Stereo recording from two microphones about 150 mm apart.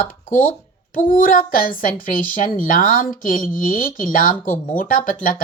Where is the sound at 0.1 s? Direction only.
65° left (ahead or behind).